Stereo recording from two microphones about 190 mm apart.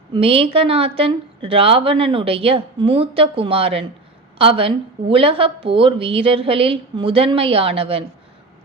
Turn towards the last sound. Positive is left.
turn(degrees=-30)  # may be behind; listen again after turning